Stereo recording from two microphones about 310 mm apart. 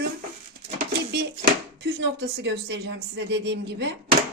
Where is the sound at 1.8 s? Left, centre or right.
Right.